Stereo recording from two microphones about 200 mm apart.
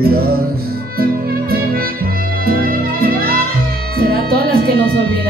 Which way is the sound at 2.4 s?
50° right (ahead or behind).